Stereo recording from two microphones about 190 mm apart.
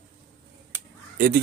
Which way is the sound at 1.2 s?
45° right (ahead or behind).